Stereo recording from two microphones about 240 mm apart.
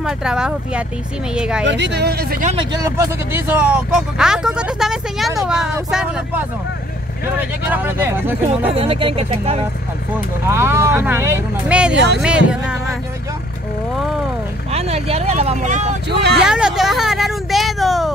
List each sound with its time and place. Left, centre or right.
0.0 s speech: centre
1.6 s speech: right
2.8 s speech: centre
8.6 s speech: right
10.5 s speech: centre
11.9 s speech: right
12.2 s speech: centre
14.7 s speech: right
16.4 s speech: centre